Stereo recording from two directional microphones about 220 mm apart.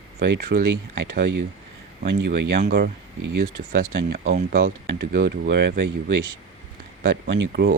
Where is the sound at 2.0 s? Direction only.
50° right (ahead or behind).